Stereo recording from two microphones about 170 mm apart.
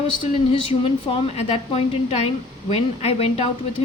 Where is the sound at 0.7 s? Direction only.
35° left (ahead or behind).